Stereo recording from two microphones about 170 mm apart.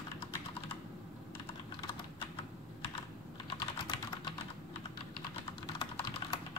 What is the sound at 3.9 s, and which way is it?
Typing, 30° left (ahead or behind).